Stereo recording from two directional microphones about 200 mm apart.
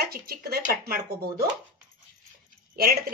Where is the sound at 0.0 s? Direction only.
50° right (ahead or behind).